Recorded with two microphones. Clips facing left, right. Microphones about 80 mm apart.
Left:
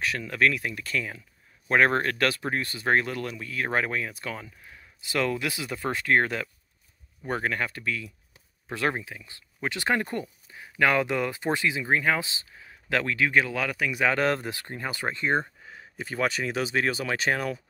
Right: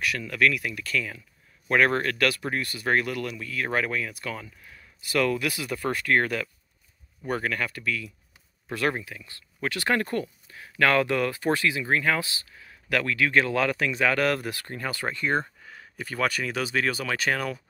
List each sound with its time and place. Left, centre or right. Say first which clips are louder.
0.2 s speech: even; left
13.4 s speech: right 2 dB; centre; by 17.6 s left